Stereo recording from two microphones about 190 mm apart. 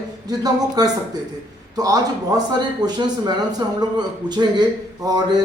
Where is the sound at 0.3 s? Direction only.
20° right (ahead or behind).